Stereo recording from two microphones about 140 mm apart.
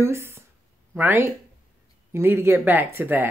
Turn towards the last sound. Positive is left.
turn(degrees=-15)  # may be behind; listen again after turning